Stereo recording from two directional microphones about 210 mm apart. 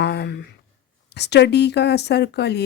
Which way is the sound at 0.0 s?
50° left (ahead or behind).